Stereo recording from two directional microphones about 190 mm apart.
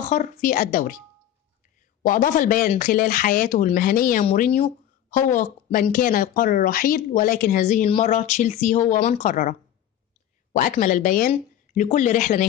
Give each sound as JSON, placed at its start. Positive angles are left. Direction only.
{"t": 0.1, "sound": "speech", "side_deg": 45}
{"t": 2.0, "sound": "speech", "side_deg": 40}
{"t": 4.5, "sound": "speech", "side_deg": 35}